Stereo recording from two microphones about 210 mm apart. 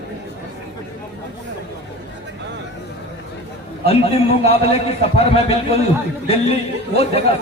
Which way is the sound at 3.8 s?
30° left (ahead or behind).